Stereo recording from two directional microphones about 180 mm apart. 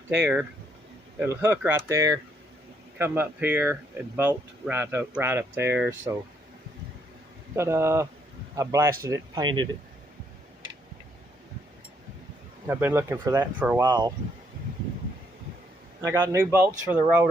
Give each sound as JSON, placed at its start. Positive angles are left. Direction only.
{"t": 0.1, "sound": "speech", "side_deg": -10}
{"t": 7.5, "sound": "speech", "side_deg": -15}
{"t": 12.6, "sound": "speech", "side_deg": -15}
{"t": 13.8, "sound": "speech", "side_deg": -25}
{"t": 16.0, "sound": "speech", "side_deg": -15}